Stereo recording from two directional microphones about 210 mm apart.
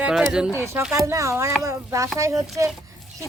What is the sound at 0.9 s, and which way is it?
Speech, 15° right (ahead or behind).